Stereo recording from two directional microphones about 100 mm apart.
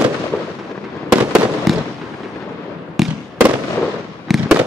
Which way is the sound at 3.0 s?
Centre (ahead or behind).